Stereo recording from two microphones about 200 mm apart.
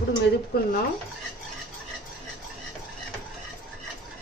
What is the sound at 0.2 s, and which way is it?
Speech, 45° left (ahead or behind).